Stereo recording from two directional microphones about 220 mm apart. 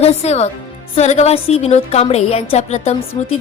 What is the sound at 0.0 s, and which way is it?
A woman's voice, 30° left (ahead or behind).